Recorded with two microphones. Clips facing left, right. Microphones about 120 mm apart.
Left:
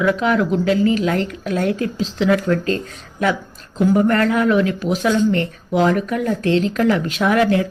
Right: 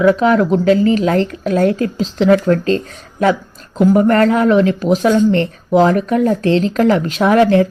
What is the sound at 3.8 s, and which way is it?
Speech, 55° right (ahead or behind).